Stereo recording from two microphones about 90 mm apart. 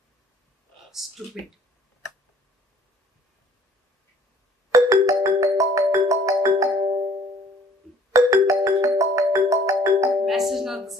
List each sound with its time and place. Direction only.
1.0 s speech: 5° right (ahead or behind)
4.7 s music: 35° right (ahead or behind)
8.1 s music: 35° right (ahead or behind)
10.2 s music: centre (ahead or behind)